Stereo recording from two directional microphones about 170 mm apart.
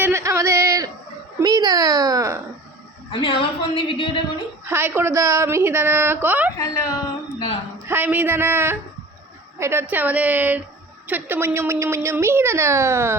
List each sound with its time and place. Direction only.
0.0 s a sound: 15° right (ahead or behind)
3.1 s a woman's voice: 30° left (ahead or behind)
4.6 s a woman's voice: 15° right (ahead or behind)
6.6 s speech: 20° left (ahead or behind)
7.9 s a woman's voice: 10° right (ahead or behind)